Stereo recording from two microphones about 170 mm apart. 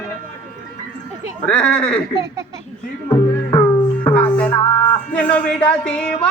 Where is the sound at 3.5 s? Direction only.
15° left (ahead or behind).